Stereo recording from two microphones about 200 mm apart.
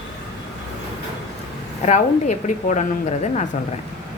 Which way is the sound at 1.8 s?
35° left (ahead or behind).